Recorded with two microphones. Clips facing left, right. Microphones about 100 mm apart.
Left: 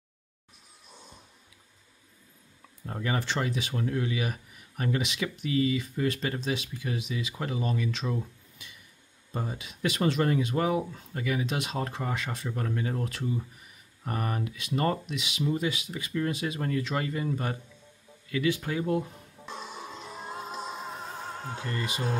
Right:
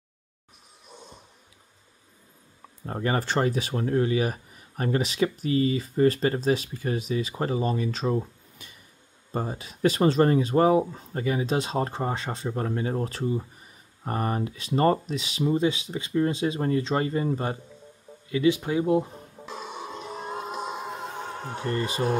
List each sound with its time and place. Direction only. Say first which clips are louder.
2.9 s speech: right 5 dB; 45° right (ahead or behind)
19.4 s music: right 3 dB; centre (ahead or behind)
21.1 s music: right 3 dB; 70° right (ahead or behind)
21.5 s speech: right 7 dB; 60° right (ahead or behind)
21.7 s speech: right 6 dB; 35° right (ahead or behind)